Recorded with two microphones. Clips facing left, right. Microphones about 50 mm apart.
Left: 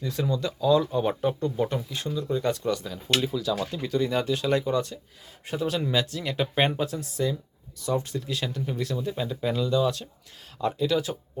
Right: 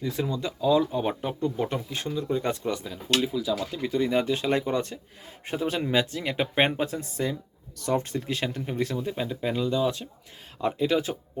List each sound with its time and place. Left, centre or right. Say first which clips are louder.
0.0 s speech: left 1 dB; centre
6.7 s speech: even; right
7.8 s speech: right 1 dB; right
9.0 s speech: even; centre